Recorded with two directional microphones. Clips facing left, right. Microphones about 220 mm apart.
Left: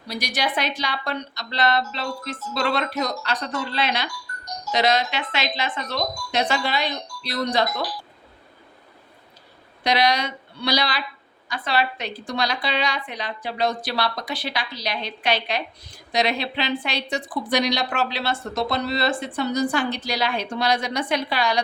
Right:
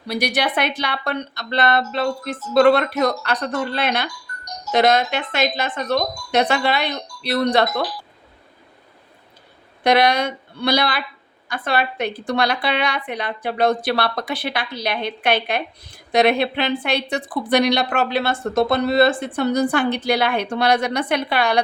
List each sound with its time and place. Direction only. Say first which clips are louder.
0.1 s a woman's voice: right 5 dB; 60° right (ahead or behind)
9.8 s a woman's voice: right 5 dB; 55° right (ahead or behind)